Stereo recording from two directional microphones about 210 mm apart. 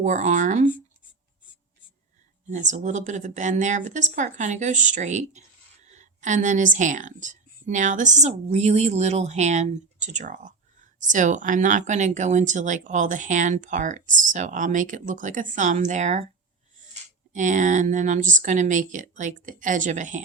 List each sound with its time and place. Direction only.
0.0 s speech: 35° right (ahead or behind)
2.5 s speech: 35° right (ahead or behind)
17.3 s speech: 35° right (ahead or behind)